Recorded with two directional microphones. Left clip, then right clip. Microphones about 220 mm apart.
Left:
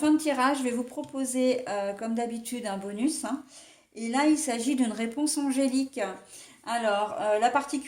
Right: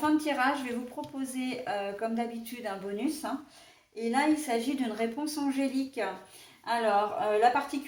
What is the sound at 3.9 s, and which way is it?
Speech, 45° left (ahead or behind).